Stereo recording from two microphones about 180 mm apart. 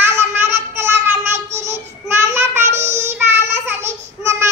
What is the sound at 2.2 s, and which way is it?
Child singing, 15° right (ahead or behind).